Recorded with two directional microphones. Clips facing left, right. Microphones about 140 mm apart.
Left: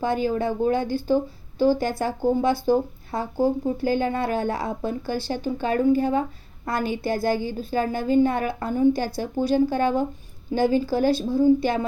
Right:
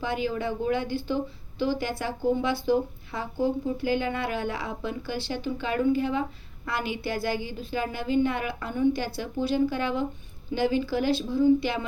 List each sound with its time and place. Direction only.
0.0 s a woman's voice: 45° left (ahead or behind)